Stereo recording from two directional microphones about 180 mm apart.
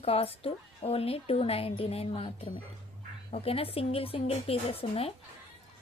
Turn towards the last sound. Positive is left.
turn(degrees=30)  # may be behind; listen again after turning